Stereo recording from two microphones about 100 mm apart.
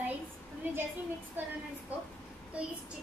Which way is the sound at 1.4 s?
20° right (ahead or behind).